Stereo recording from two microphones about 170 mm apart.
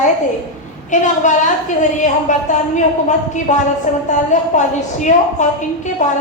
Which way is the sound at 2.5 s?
45° left (ahead or behind).